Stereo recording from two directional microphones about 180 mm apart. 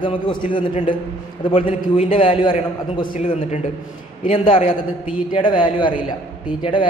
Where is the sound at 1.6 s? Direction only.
35° left (ahead or behind).